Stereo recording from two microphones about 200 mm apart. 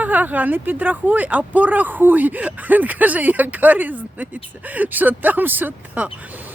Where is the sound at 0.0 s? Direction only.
10° right (ahead or behind).